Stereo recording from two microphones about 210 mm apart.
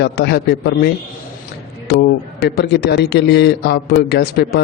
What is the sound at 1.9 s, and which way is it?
Speech, 50° left (ahead or behind).